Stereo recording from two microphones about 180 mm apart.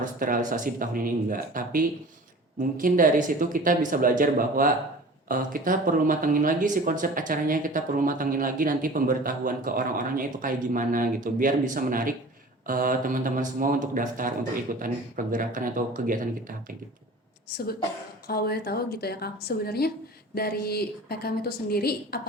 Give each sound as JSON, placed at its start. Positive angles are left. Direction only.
{"t": 0.0, "sound": "speech", "side_deg": -50}
{"t": 18.3, "sound": "a woman's voice", "side_deg": 60}